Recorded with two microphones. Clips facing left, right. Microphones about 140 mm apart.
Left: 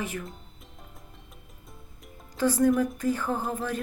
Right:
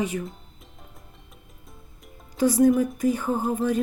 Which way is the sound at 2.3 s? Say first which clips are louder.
Right 4 dB; 15° right (ahead or behind).